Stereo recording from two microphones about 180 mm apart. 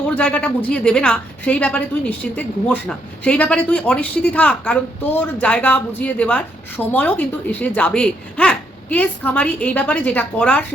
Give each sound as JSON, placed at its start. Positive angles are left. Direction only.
{"t": 0.2, "sound": "a woman's voice", "side_deg": 5}